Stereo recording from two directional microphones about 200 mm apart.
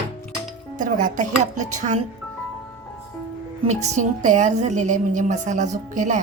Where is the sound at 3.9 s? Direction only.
40° right (ahead or behind).